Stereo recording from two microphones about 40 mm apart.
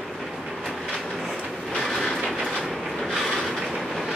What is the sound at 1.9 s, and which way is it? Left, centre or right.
Train, centre.